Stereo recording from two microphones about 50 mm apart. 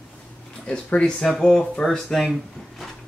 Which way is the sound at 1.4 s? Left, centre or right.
Centre.